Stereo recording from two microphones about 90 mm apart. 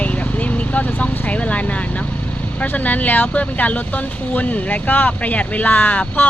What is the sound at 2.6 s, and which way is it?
Speech, 20° left (ahead or behind).